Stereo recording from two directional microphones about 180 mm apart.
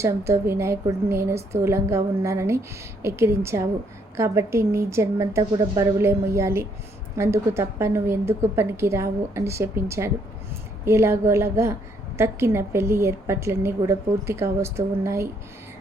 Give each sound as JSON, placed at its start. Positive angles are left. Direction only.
{"t": 0.0, "sound": "a woman's voice", "side_deg": -15}